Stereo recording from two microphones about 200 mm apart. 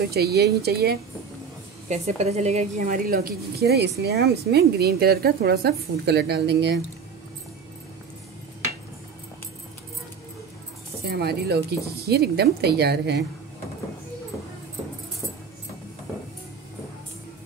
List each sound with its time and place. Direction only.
0.1 s a woman's voice: 55° right (ahead or behind)
1.9 s a woman's voice: 30° right (ahead or behind); by 6.8 s 55° right (ahead or behind)
11.1 s a woman's voice: 55° right (ahead or behind)